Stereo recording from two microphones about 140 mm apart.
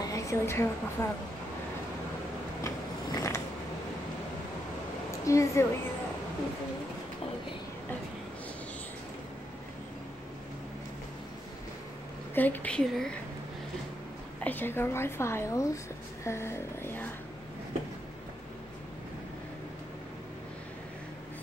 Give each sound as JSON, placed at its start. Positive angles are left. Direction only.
{"t": 0.1, "sound": "a sound", "side_deg": 20}
{"t": 1.0, "sound": "a woman's voice", "side_deg": 20}
{"t": 2.6, "sound": "mechanisms", "side_deg": 25}
{"t": 5.2, "sound": "a woman's voice", "side_deg": 20}
{"t": 12.4, "sound": "a woman's voice", "side_deg": 10}
{"t": 14.4, "sound": "a woman's voice", "side_deg": 15}
{"t": 16.3, "sound": "a sound", "side_deg": 20}